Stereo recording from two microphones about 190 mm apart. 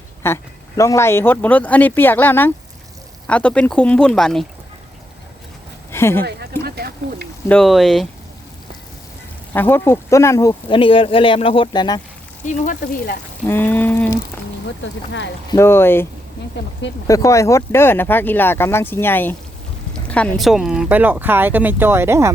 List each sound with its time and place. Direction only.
0.2 s speech: 15° left (ahead or behind)
5.9 s speech: 15° left (ahead or behind)
6.6 s a sound: 55° right (ahead or behind)
7.4 s speech: 5° left (ahead or behind)
9.5 s speech: 10° left (ahead or behind)
12.5 s speech: 45° left (ahead or behind)
13.5 s a sound: 10° left (ahead or behind)
15.4 s speech: 15° left (ahead or behind)
17.1 s speech: 15° left (ahead or behind); by 22.3 s 15° right (ahead or behind)